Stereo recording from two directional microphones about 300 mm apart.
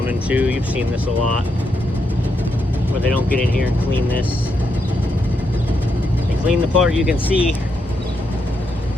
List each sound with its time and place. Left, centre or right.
0.1 s speech: centre
3.1 s speech: centre
6.5 s speech: centre